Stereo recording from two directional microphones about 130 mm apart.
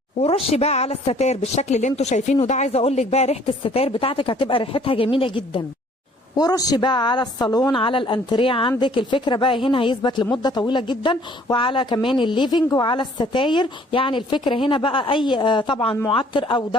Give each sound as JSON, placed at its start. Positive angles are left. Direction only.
{"t": 0.2, "sound": "a woman's voice", "side_deg": 50}
{"t": 6.3, "sound": "a woman's voice", "side_deg": 30}